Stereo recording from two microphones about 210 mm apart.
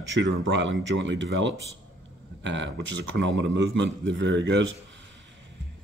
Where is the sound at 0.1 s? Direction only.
60° right (ahead or behind).